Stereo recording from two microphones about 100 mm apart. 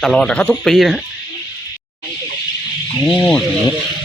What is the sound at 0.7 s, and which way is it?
Speech, centre (ahead or behind).